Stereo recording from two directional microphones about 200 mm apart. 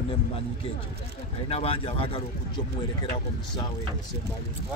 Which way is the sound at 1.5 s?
30° left (ahead or behind).